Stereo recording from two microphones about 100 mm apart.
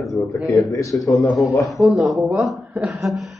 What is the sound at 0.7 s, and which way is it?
Speech, 35° left (ahead or behind).